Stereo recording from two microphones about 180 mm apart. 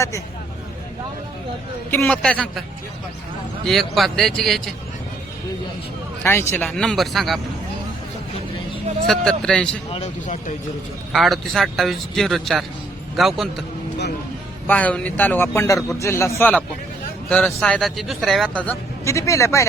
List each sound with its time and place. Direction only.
1.9 s speech: 10° left (ahead or behind)
6.2 s speech: 15° left (ahead or behind)
6.7 s speech: centre (ahead or behind)
9.0 s speech: 5° left (ahead or behind)
9.9 s speech: 40° left (ahead or behind)
11.1 s speech: centre (ahead or behind)
14.7 s speech: 10° left (ahead or behind)